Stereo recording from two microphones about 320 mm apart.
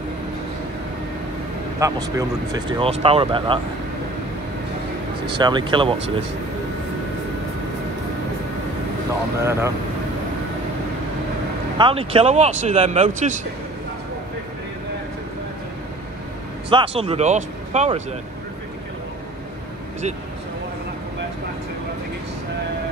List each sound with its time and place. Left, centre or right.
1.8 s speech: centre
5.4 s speech: centre
9.4 s speech: centre
11.8 s speech: centre
16.6 s speech: centre